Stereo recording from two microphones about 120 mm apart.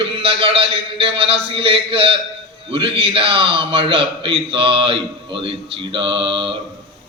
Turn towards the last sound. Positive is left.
turn(degrees=-45)  # may be behind; listen again after turning